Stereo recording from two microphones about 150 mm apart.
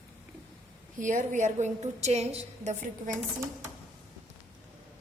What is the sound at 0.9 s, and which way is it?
A woman's voice, 60° right (ahead or behind).